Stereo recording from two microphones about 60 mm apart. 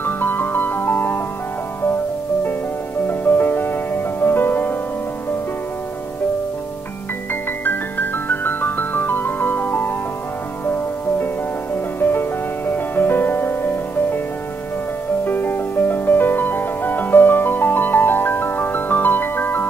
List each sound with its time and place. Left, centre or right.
0.0 s music: left
3.1 s music: left
7.6 s music: left
11.7 s music: left
15.2 s music: left